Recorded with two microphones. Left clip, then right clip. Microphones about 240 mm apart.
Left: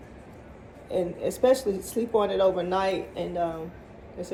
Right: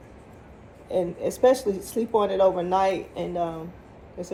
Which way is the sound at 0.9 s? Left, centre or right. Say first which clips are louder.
Right 2 dB; right.